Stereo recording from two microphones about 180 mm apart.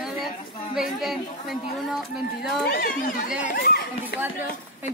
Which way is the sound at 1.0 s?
Centre (ahead or behind).